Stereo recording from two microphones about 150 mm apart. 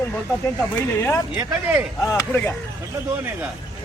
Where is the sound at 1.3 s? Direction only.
15° right (ahead or behind).